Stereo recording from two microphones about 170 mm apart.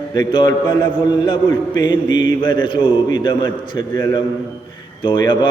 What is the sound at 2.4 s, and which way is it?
A man's voice, 25° left (ahead or behind).